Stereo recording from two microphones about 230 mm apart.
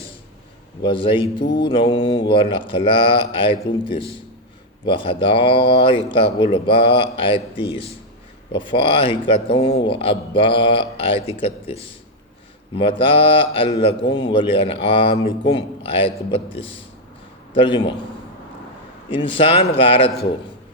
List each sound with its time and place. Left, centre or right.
0.8 s speech: left
19.1 s speech: left